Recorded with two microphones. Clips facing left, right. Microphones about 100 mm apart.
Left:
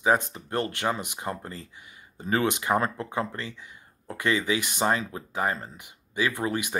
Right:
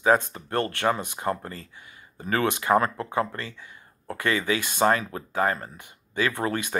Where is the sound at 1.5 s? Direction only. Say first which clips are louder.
Even; 20° left (ahead or behind).